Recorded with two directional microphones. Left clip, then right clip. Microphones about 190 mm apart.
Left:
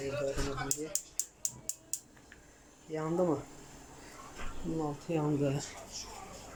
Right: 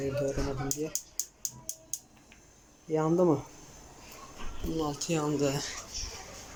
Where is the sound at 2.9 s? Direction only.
10° right (ahead or behind).